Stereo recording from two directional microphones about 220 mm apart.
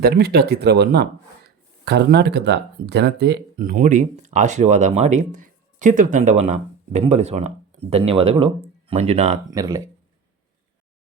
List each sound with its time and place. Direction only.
0.0 s speech: 45° right (ahead or behind); by 9.4 s 30° right (ahead or behind)
9.5 s speech: 15° right (ahead or behind)